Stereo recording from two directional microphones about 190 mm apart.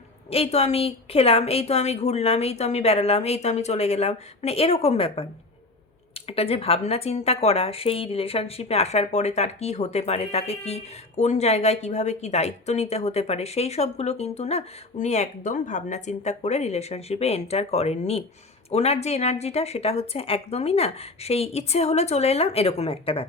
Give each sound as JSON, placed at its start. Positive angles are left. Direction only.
{"t": 0.3, "sound": "a woman's voice", "side_deg": 30}
{"t": 6.2, "sound": "a woman's voice", "side_deg": 30}